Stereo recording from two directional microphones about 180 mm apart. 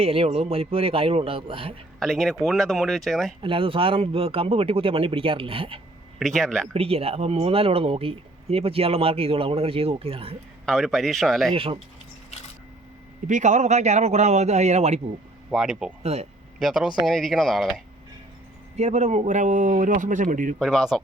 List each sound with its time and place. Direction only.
0.0 s speech: 30° right (ahead or behind)
2.0 s speech: centre (ahead or behind)
3.4 s speech: 30° right (ahead or behind)
6.1 s speech: centre (ahead or behind)
6.7 s speech: 35° right (ahead or behind)
10.7 s speech: centre (ahead or behind)
11.5 s speech: 30° right (ahead or behind)
13.2 s speech: 40° right (ahead or behind)
15.4 s speech: 5° right (ahead or behind)
16.1 s speech: 35° right (ahead or behind)
16.6 s speech: centre (ahead or behind)
18.8 s speech: 40° right (ahead or behind)
20.6 s speech: centre (ahead or behind)